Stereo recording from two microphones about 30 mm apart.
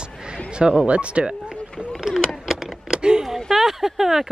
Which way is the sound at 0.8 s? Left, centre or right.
Right.